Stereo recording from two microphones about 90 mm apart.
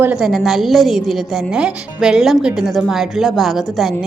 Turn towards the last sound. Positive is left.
turn(degrees=0)  # may be behind; listen again after turning